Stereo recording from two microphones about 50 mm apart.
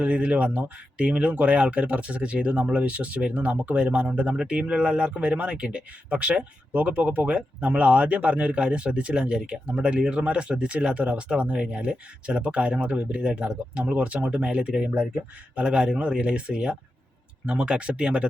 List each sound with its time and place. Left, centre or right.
0.0 s speech: right